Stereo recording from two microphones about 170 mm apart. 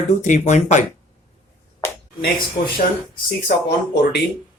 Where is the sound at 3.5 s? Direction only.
70° left (ahead or behind).